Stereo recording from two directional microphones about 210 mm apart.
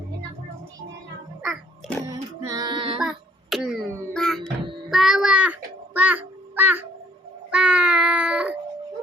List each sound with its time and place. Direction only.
1.4 s a sound: centre (ahead or behind)
2.0 s child singing: 15° right (ahead or behind)
3.0 s a sound: centre (ahead or behind)
4.1 s music: centre (ahead or behind)
4.9 s child singing: centre (ahead or behind)
7.5 s baby cry: 5° right (ahead or behind)